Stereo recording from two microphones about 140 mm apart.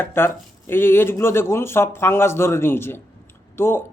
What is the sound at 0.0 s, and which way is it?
A man's voice, 15° left (ahead or behind).